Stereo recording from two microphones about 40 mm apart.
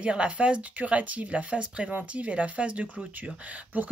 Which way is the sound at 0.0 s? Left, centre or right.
Right.